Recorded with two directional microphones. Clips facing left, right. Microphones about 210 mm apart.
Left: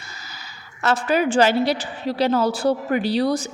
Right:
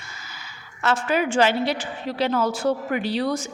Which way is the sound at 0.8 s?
35° left (ahead or behind).